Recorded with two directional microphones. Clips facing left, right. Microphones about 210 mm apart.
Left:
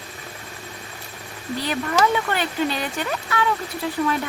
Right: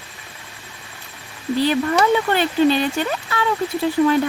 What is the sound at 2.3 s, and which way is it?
Speech, 30° right (ahead or behind).